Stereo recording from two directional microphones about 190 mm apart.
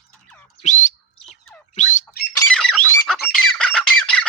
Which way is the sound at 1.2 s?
5° left (ahead or behind).